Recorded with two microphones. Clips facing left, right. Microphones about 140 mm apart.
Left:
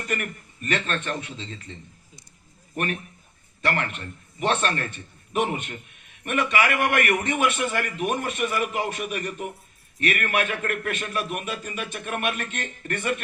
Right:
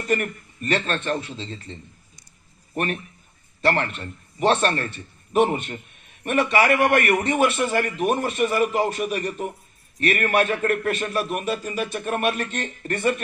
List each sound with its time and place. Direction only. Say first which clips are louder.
0.1 s a man's voice: right 8 dB; 35° right (ahead or behind)